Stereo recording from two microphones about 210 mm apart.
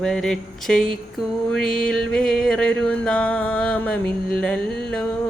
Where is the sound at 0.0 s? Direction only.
5° left (ahead or behind).